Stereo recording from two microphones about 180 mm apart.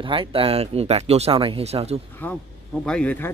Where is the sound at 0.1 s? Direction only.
30° right (ahead or behind).